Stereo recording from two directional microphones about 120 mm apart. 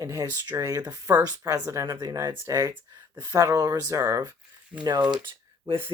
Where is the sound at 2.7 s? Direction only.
40° right (ahead or behind).